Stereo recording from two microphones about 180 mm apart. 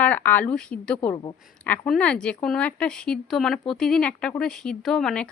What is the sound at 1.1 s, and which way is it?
Speech, 25° left (ahead or behind).